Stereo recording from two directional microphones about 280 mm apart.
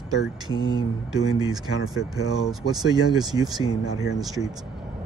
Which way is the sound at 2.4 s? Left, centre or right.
Centre.